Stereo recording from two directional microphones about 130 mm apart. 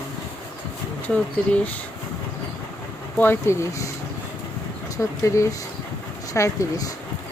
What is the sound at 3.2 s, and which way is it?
Speech, 20° left (ahead or behind).